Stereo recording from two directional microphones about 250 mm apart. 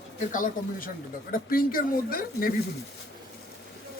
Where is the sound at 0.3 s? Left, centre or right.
Left.